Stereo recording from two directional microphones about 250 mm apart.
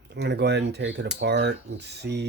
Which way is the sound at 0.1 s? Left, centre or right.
Right.